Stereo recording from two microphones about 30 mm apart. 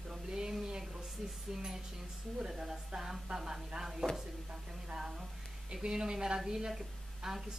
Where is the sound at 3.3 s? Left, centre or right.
Centre.